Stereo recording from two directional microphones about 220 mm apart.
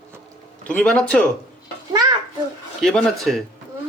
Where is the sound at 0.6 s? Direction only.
5° left (ahead or behind).